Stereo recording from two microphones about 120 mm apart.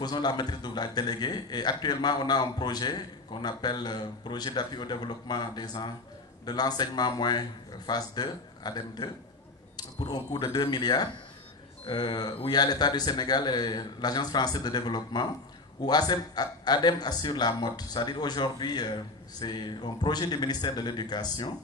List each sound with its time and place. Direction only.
0.0 s a man's voice: 35° left (ahead or behind)